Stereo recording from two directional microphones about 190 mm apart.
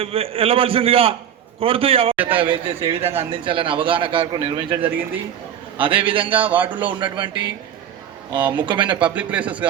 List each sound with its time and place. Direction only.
0.0 s a man's voice: 30° right (ahead or behind)
2.1 s a man's voice: 10° right (ahead or behind)
2.4 s a man's voice: 25° right (ahead or behind)
4.8 s speech: 10° right (ahead or behind)
5.7 s a man's voice: 25° right (ahead or behind)
6.3 s speech: 10° right (ahead or behind)
8.3 s speech: 10° right (ahead or behind)
8.6 s a man's voice: 25° right (ahead or behind)
9.0 s speech: 5° right (ahead or behind)